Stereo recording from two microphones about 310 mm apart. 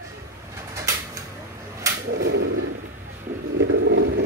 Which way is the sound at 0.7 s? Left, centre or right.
Centre.